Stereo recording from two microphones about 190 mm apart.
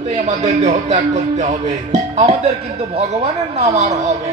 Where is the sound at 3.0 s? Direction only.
35° right (ahead or behind).